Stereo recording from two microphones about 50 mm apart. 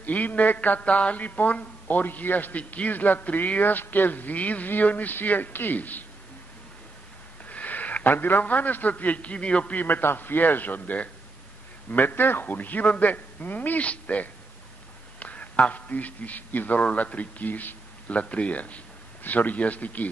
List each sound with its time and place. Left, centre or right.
0.0 s speech: left
7.4 s a man's voice: left
9.8 s a man's voice: left